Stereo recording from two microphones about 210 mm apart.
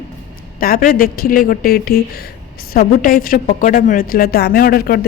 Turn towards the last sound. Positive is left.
turn(degrees=45)  # may be behind; listen again after turning